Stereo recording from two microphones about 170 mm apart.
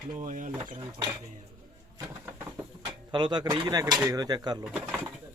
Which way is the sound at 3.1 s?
25° right (ahead or behind).